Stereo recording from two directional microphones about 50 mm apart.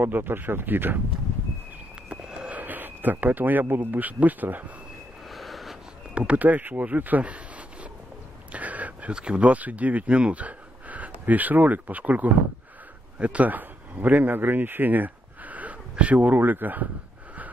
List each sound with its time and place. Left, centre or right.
0.0 s speech: right
2.0 s a sound: centre
2.5 s speech: right
5.3 s snort: centre
6.1 s speech: right
8.5 s a sound: right
9.1 s speech: centre; by 16.9 s right